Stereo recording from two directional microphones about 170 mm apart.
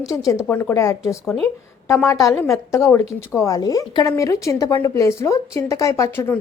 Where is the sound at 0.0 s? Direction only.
Centre (ahead or behind).